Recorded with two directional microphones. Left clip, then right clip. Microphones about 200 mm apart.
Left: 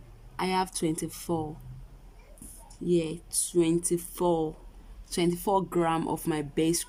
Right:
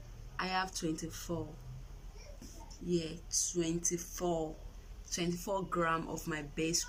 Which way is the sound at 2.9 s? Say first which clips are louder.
Left 7 dB; 55° left (ahead or behind).